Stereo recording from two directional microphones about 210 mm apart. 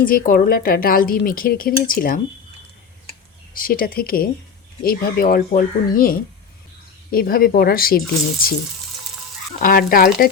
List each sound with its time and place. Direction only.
0.0 s speech: 45° left (ahead or behind)
3.5 s speech: 40° left (ahead or behind)
9.6 s speech: 40° left (ahead or behind)